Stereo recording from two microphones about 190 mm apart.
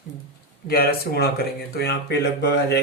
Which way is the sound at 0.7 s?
55° left (ahead or behind).